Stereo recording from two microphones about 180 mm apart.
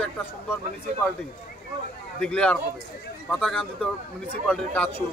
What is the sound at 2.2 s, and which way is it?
A man's voice, 5° left (ahead or behind).